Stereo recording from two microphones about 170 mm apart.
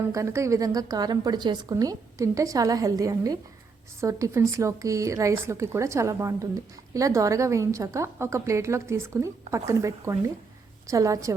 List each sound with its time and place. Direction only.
0.1 s a woman's voice: 15° right (ahead or behind)